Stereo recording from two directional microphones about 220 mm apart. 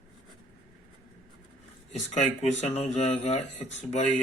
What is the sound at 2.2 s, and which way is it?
Speech, 30° left (ahead or behind).